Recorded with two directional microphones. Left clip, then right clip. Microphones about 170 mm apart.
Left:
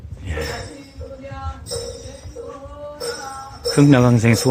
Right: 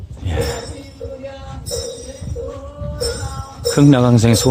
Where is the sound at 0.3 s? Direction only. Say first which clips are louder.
Right 5 dB; 20° right (ahead or behind).